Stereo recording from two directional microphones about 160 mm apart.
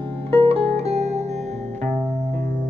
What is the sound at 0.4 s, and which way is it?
Music, 35° right (ahead or behind).